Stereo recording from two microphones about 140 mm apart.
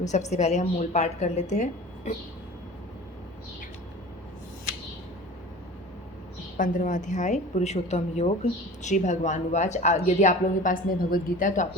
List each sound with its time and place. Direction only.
0.0 s a woman's voice: 55° left (ahead or behind)
6.6 s a woman's voice: 70° left (ahead or behind)